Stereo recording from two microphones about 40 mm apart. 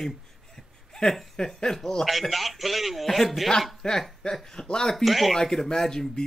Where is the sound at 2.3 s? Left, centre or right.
Centre.